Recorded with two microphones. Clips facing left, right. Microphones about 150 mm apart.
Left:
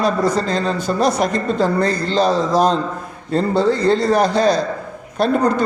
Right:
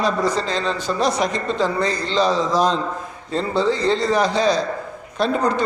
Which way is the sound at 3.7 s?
55° left (ahead or behind).